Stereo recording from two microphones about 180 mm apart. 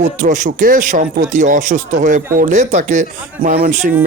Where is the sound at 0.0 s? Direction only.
45° right (ahead or behind).